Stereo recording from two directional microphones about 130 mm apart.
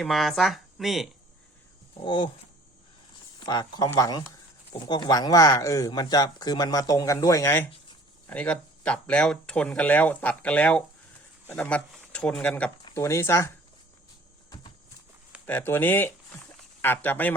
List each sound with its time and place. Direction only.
0.0 s speech: centre (ahead or behind)
2.0 s speech: 40° left (ahead or behind)
3.4 s speech: 35° left (ahead or behind); by 12.7 s 10° left (ahead or behind)
12.9 s speech: 20° left (ahead or behind)
15.4 s speech: 15° left (ahead or behind)